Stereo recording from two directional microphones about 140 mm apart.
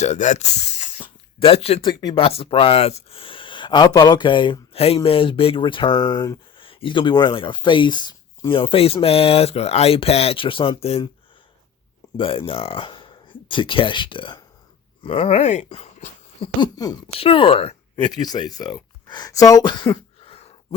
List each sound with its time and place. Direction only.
0.0 s speech: 60° left (ahead or behind)
1.9 s speech: 30° left (ahead or behind)
2.2 s speech: 40° left (ahead or behind)
6.6 s speech: 40° left (ahead or behind)
12.1 s speech: 40° left (ahead or behind)
16.6 s speech: 30° left (ahead or behind)
17.2 s speech: 40° left (ahead or behind)
18.2 s speech: 30° left (ahead or behind)